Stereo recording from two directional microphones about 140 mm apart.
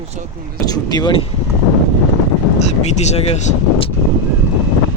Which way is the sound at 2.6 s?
55° left (ahead or behind).